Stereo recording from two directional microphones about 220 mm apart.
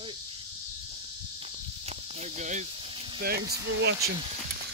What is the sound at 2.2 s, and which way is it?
Snake, 35° right (ahead or behind).